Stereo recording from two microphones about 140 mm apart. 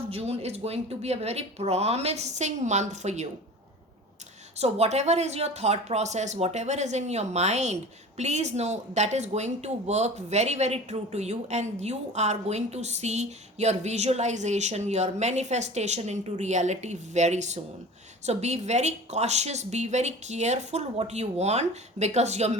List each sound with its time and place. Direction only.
0.1 s speech: 45° right (ahead or behind)
4.5 s speech: 50° right (ahead or behind)